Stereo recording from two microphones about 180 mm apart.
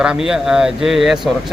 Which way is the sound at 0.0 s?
5° right (ahead or behind).